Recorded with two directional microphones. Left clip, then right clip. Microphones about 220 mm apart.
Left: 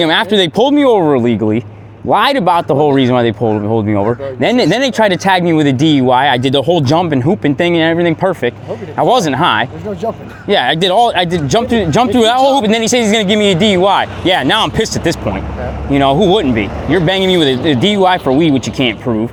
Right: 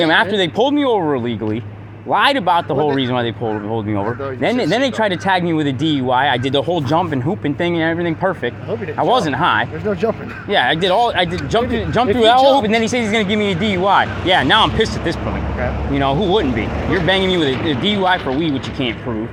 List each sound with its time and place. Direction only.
0.0 s speech: 55° left (ahead or behind)